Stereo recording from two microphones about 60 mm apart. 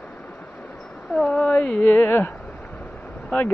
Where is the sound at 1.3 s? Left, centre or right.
Centre.